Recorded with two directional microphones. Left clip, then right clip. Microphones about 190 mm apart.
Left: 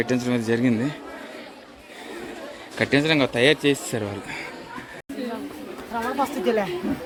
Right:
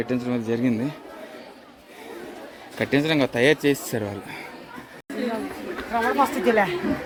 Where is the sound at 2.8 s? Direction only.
10° right (ahead or behind).